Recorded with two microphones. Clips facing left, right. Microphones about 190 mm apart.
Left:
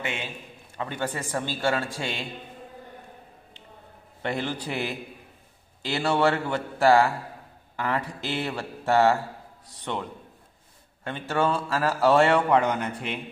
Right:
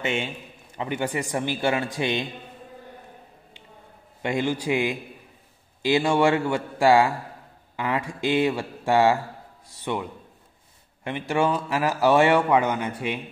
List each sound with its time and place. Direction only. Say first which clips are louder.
0.0 s a man's voice: right 5 dB; 25° right (ahead or behind)
4.2 s a man's voice: right 4 dB; 15° right (ahead or behind)
11.1 s a man's voice: right 2 dB; 15° right (ahead or behind)